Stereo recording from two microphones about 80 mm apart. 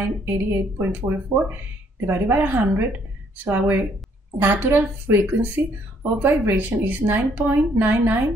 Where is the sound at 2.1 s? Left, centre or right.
Right.